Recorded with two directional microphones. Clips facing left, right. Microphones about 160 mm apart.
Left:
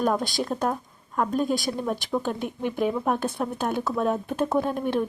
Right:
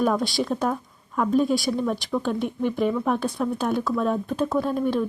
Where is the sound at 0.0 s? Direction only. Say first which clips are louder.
Right 2 dB; centre (ahead or behind).